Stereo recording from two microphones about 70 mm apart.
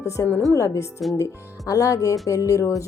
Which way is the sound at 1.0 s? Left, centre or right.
Centre.